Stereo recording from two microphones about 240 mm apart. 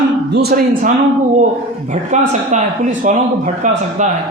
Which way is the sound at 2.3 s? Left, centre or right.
Right.